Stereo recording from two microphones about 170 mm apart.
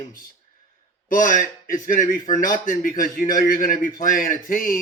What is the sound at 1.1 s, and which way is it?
A man's voice, 50° left (ahead or behind).